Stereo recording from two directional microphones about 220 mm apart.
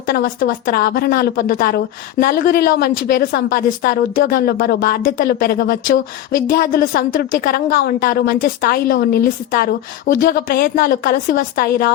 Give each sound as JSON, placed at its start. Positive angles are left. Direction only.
{"t": 0.1, "sound": "a woman's voice", "side_deg": 40}